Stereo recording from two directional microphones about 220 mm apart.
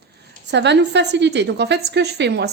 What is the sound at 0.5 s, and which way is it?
A woman's voice, 50° right (ahead or behind).